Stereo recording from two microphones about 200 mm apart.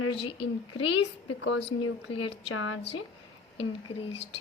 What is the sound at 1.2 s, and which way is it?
Speech, 70° left (ahead or behind).